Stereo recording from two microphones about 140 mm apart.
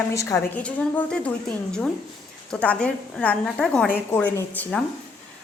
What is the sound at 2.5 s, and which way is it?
A woman's voice, 5° left (ahead or behind).